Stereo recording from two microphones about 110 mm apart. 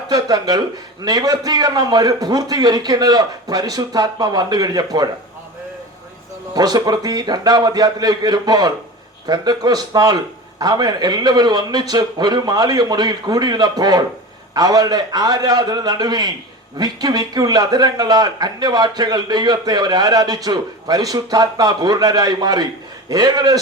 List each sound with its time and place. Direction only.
0.1 s a man's voice: 35° right (ahead or behind)
6.5 s a man's voice: 40° right (ahead or behind)